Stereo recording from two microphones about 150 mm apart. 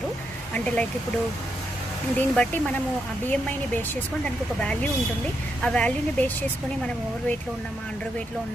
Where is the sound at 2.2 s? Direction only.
10° left (ahead or behind).